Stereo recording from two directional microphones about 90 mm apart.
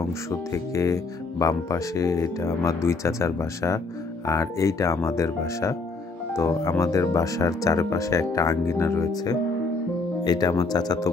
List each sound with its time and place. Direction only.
0.3 s speech: 35° left (ahead or behind)
9.1 s speech: 45° left (ahead or behind)